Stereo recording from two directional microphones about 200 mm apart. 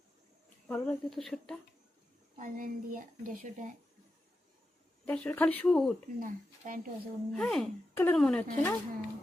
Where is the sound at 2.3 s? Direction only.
40° right (ahead or behind).